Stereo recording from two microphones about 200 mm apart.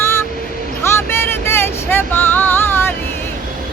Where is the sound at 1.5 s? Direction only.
10° left (ahead or behind).